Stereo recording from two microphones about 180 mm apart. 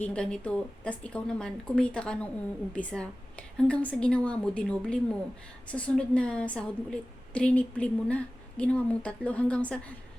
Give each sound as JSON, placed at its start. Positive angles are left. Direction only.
{"t": 0.0, "sound": "a woman's voice", "side_deg": 5}